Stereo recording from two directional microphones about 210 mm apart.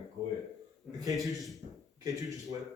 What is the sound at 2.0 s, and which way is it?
Mantra, 15° right (ahead or behind).